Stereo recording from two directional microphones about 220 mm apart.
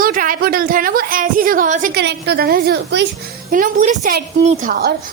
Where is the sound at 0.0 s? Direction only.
40° right (ahead or behind).